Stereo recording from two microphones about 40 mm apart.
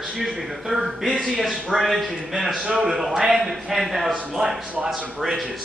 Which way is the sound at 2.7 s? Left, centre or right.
Centre.